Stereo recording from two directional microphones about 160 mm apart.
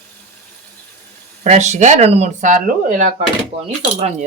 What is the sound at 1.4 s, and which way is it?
Speech, 45° right (ahead or behind).